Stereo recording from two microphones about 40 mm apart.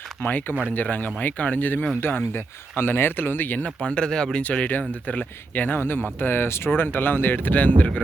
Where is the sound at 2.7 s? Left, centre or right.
Left.